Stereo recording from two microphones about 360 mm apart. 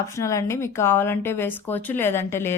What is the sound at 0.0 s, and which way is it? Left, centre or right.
Speech, centre.